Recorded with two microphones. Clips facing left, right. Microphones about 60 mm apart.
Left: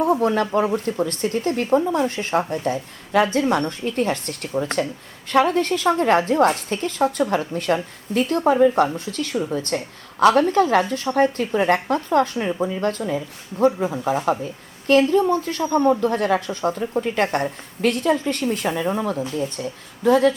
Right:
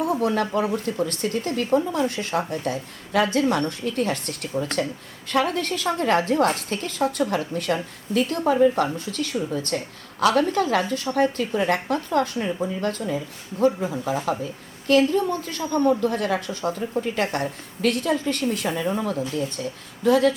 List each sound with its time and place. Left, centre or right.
0.0 s a sound: left
0.8 s a woman's voice: left
13.7 s speech: left
14.0 s a woman's voice: left